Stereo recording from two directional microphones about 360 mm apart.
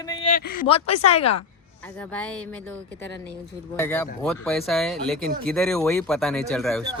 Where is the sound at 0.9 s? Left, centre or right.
Left.